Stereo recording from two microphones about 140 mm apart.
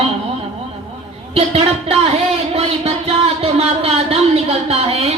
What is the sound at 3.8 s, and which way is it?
Speech, 45° right (ahead or behind).